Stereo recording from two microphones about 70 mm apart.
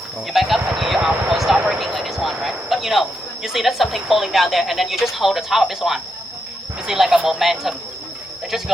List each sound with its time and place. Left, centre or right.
0.3 s speech: centre
1.5 s speech: centre
1.8 s speech: centre